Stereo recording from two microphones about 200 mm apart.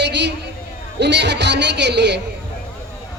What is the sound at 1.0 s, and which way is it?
A man's voice, 60° right (ahead or behind).